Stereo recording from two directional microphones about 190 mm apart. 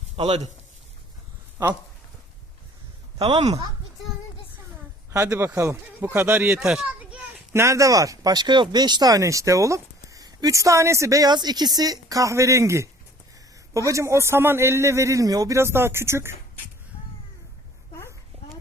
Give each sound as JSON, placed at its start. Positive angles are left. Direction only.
{"t": 0.2, "sound": "speech", "side_deg": -35}
{"t": 3.2, "sound": "speech", "side_deg": -25}
{"t": 5.1, "sound": "speech", "side_deg": -15}